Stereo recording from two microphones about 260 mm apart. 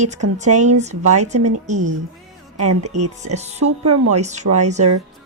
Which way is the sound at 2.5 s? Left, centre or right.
Right.